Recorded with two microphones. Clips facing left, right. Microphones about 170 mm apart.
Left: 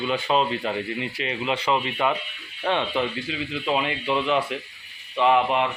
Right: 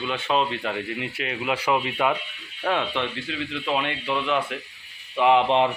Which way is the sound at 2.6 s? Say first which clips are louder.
Left 1 dB; centre (ahead or behind).